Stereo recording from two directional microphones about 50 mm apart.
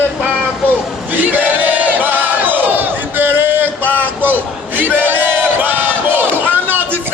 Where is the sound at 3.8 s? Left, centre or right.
Left.